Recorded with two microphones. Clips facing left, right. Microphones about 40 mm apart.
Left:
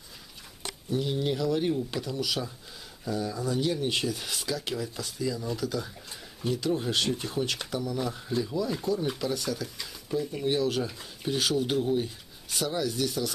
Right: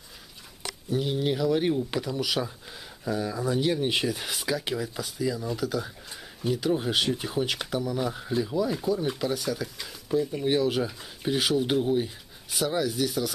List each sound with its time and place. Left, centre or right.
0.9 s speech: centre